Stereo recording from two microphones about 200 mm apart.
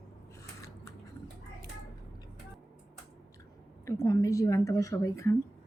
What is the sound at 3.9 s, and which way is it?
A woman's voice, 15° left (ahead or behind).